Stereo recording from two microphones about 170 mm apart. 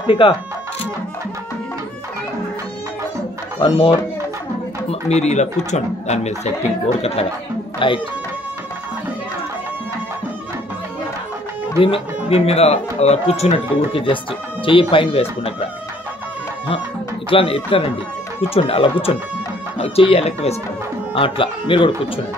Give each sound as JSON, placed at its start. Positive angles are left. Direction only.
{"t": 0.0, "sound": "speech", "side_deg": 30}
{"t": 3.6, "sound": "speech", "side_deg": 30}
{"t": 5.0, "sound": "speech", "side_deg": 40}
{"t": 11.8, "sound": "speech", "side_deg": 35}
{"t": 17.3, "sound": "speech", "side_deg": 30}